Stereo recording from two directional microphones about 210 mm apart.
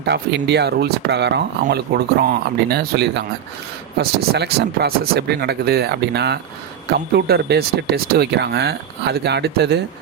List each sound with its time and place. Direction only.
0.0 s speech: 55° right (ahead or behind)